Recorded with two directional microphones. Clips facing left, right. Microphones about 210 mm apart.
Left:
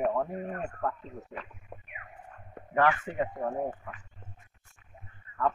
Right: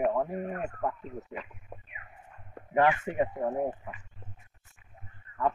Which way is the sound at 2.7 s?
20° right (ahead or behind).